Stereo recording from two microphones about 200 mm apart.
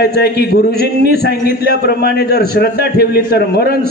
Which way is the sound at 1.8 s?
55° left (ahead or behind).